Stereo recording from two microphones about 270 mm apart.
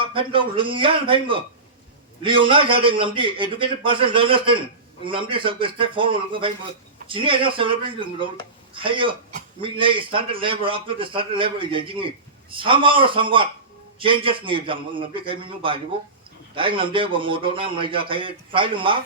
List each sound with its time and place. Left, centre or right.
0.0 s a man's voice: centre